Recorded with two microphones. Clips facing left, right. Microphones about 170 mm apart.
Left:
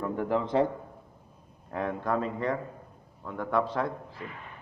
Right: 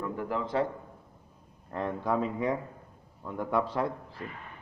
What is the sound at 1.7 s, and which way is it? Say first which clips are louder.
Speech: left 1 dB; 5° left (ahead or behind).